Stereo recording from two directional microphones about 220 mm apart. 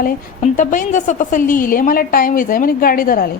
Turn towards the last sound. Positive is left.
turn(degrees=40)  # may be behind; listen again after turning